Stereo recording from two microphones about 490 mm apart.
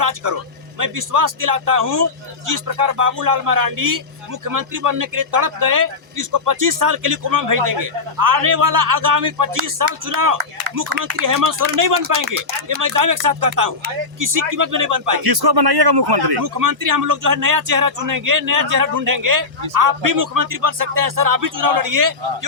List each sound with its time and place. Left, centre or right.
0.0 s speech: right